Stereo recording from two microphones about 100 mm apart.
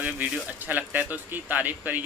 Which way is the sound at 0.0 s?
15° right (ahead or behind).